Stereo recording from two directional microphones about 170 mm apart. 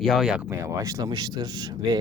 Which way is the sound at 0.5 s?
15° right (ahead or behind).